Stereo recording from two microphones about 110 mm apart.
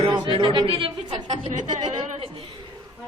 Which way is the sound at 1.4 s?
90° right.